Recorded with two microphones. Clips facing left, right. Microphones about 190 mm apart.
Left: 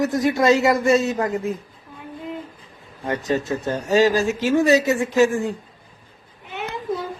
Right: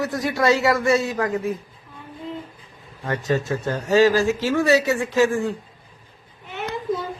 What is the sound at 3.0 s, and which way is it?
A man's voice, 20° left (ahead or behind).